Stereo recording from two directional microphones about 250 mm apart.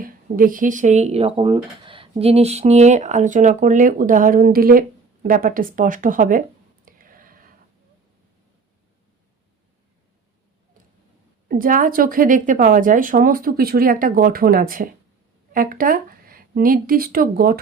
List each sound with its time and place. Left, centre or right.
0.0 s a woman's voice: right
6.8 s whispering: right
11.4 s a woman's voice: right